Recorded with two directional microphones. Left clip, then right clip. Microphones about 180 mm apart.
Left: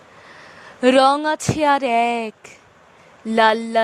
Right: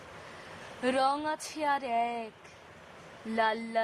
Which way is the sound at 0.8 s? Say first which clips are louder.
Left 14 dB; 45° left (ahead or behind).